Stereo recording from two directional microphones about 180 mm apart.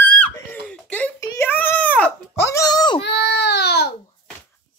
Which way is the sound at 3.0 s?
70° left (ahead or behind).